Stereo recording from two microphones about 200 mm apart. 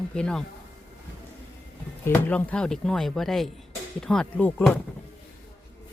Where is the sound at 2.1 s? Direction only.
5° left (ahead or behind).